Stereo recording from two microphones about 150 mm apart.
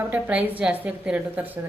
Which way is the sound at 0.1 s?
10° right (ahead or behind).